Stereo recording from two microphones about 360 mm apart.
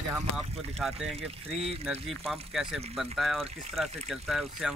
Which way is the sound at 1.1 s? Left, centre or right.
Centre.